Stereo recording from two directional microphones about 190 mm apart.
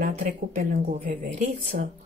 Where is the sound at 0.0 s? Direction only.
45° right (ahead or behind).